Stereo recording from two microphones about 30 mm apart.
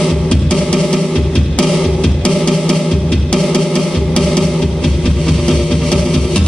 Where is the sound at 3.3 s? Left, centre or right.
Left.